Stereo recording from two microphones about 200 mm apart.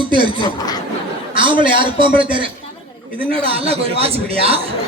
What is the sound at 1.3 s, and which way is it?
Speech, 25° right (ahead or behind).